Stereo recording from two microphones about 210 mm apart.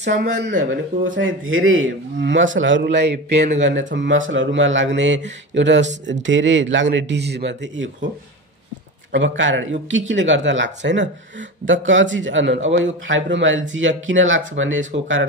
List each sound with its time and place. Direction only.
0.1 s speech: 40° right (ahead or behind)
1.0 s a man's voice: 65° right (ahead or behind)
9.1 s a man's voice: 60° right (ahead or behind)